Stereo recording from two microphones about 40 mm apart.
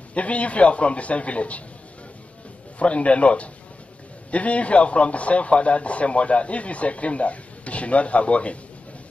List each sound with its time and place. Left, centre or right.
0.1 s a man's voice: left
2.8 s a man's voice: left